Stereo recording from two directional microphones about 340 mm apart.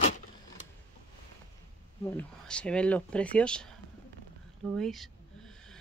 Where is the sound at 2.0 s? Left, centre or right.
Centre.